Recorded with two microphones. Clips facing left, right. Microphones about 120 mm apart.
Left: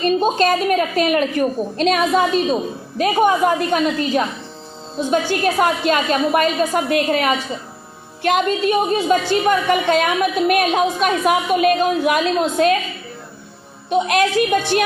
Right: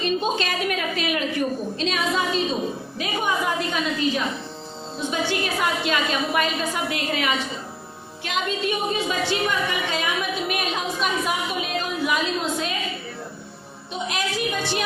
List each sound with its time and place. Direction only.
0.0 s a woman's voice: 45° left (ahead or behind); by 12.7 s 60° left (ahead or behind)
13.9 s a woman's voice: 60° left (ahead or behind)